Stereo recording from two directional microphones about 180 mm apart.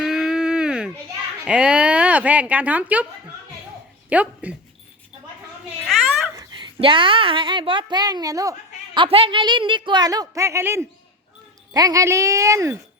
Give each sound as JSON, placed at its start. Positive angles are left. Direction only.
{"t": 0.0, "sound": "a sound", "side_deg": 0}
{"t": 1.5, "sound": "speech", "side_deg": -5}
{"t": 4.1, "sound": "speech", "side_deg": -10}
{"t": 5.9, "sound": "a sound", "side_deg": 0}
{"t": 6.3, "sound": "a woman's voice", "side_deg": -20}
{"t": 9.0, "sound": "a woman's voice", "side_deg": -30}